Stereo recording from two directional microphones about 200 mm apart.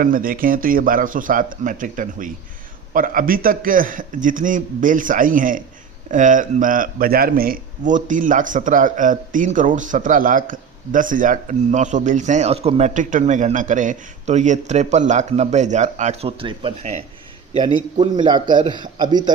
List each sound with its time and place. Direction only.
0.0 s a man's voice: 45° right (ahead or behind); by 16.9 s 25° right (ahead or behind)
18.0 s a man's voice: 25° right (ahead or behind)